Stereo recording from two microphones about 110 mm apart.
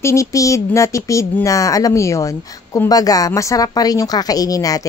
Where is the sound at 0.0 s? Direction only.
30° left (ahead or behind).